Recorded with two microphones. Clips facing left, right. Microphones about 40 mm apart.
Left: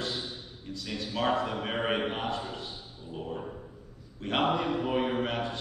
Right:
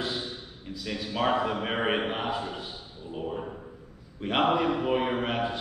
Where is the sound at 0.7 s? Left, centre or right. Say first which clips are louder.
Right 3 dB; centre.